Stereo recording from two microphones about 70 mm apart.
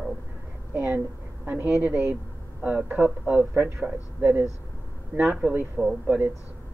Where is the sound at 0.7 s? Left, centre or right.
Right.